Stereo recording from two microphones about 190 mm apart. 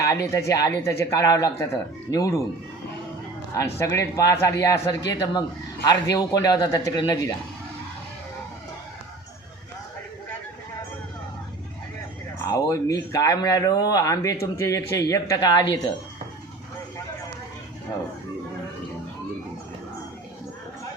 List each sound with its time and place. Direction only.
0.0 s speech: 15° left (ahead or behind)
3.8 s a man's voice: 15° left (ahead or behind)
12.5 s speech: 15° left (ahead or behind)